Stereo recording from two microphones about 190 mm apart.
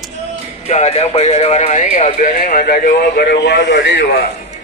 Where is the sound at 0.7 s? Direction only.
35° left (ahead or behind); by 4.1 s 70° left (ahead or behind).